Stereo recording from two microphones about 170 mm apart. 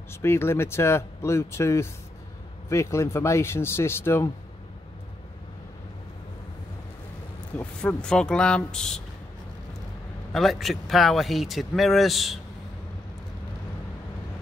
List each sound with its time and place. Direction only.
0.1 s speech: 15° left (ahead or behind)
7.5 s speech: 5° left (ahead or behind)
10.3 s speech: centre (ahead or behind)